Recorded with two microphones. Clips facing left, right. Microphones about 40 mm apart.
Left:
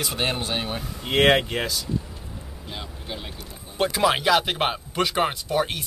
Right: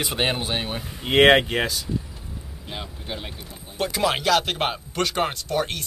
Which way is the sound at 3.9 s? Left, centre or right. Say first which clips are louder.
Left 1 dB; centre.